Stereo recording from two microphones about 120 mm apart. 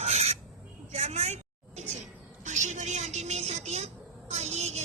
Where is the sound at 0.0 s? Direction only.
65° right (ahead or behind).